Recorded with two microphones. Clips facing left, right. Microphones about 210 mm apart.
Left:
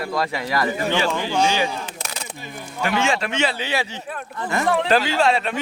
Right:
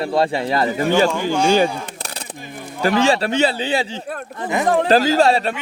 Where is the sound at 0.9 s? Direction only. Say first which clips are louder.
Right 6 dB; 45° right (ahead or behind).